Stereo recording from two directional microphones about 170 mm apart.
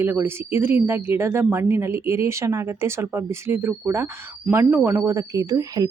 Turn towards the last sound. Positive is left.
turn(degrees=-20)  # may be behind; listen again after turning